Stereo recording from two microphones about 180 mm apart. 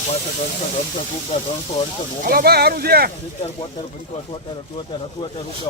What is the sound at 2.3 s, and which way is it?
Speech, 60° right (ahead or behind).